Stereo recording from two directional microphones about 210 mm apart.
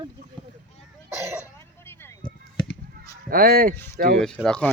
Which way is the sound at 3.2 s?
45° right (ahead or behind).